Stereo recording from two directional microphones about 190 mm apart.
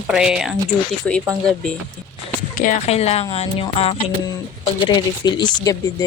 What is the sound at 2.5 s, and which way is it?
Speech, 40° left (ahead or behind).